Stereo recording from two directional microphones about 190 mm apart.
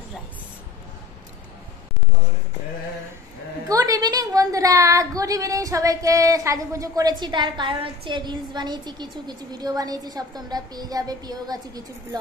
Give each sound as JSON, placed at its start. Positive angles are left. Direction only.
{"t": 3.6, "sound": "a woman's voice", "side_deg": -20}